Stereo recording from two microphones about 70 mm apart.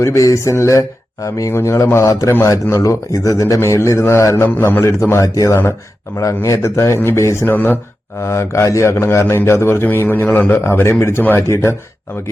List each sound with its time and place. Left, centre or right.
0.0 s a man's voice: left
4.4 s a man's voice: left
4.8 s a man's voice: left
8.2 s a man's voice: left
10.6 s speech: left
11.2 s a man's voice: left
11.4 s speech: left